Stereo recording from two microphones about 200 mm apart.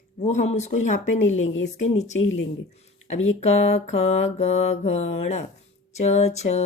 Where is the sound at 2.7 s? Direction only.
35° left (ahead or behind).